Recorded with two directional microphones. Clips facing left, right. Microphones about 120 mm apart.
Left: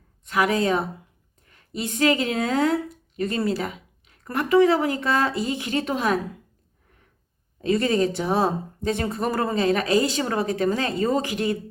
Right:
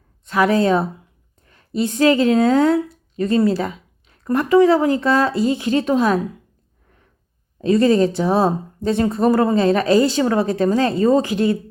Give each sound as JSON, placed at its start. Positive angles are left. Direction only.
{"t": 0.3, "sound": "a woman's voice", "side_deg": -35}
{"t": 7.6, "sound": "speech", "side_deg": -30}